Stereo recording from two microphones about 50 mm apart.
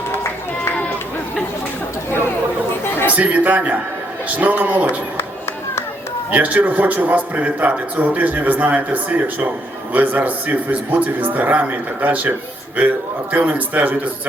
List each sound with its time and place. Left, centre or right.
2.8 s a sound: left
3.2 s a man's voice: right
6.3 s a man's voice: right
13.3 s a man's voice: right